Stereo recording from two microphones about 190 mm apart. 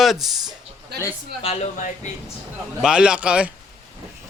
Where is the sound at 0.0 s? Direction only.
Centre (ahead or behind).